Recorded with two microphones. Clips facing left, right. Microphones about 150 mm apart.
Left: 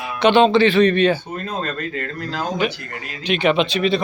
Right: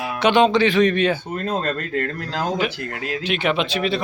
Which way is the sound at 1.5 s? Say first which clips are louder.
Right 2 dB; 60° right (ahead or behind).